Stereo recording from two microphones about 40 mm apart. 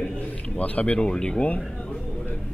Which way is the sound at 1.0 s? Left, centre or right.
Left.